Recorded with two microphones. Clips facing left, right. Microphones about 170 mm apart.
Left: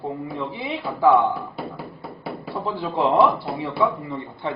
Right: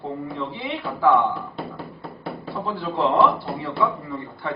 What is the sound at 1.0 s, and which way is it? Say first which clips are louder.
Speech: left 2 dB; 15° left (ahead or behind).